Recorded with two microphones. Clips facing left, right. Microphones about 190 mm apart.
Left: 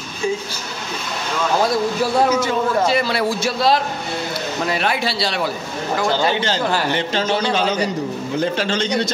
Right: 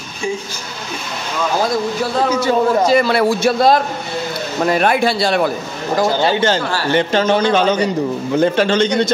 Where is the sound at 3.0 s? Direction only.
55° right (ahead or behind).